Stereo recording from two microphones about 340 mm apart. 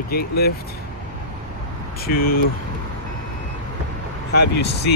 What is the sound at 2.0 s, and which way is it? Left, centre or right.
Speech, left.